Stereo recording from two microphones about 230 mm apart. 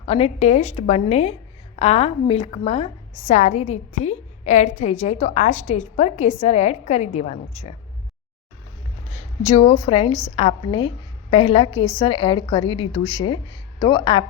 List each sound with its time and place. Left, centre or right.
0.0 s a woman's voice: left
9.6 s a woman's voice: left